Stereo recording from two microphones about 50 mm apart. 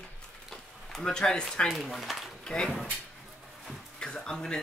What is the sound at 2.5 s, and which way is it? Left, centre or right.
Speech, centre.